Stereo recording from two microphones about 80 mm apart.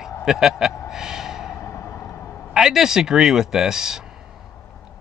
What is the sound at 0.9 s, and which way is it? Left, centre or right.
Gasp, centre.